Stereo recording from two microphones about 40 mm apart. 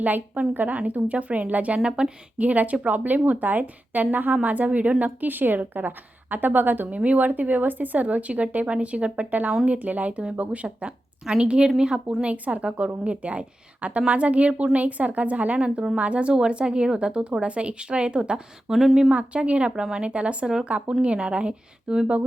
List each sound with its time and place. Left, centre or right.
0.5 s a woman's voice: right
1.8 s speech: centre
2.4 s a woman's voice: right
7.0 s speech: right
11.3 s speech: right
12.2 s speech: right
15.6 s speech: right
18.7 s speech: centre
19.1 s speech: right
19.8 s speech: centre
20.1 s speech: right